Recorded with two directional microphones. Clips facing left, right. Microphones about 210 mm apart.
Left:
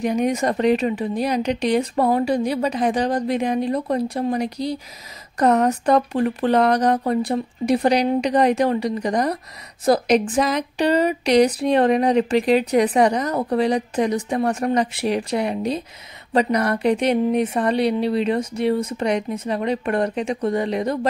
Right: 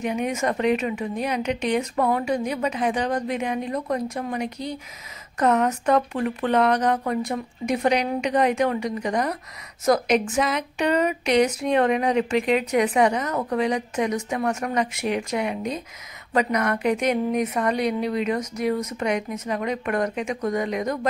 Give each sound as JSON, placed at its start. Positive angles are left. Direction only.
{"t": 0.0, "sound": "speech", "side_deg": 35}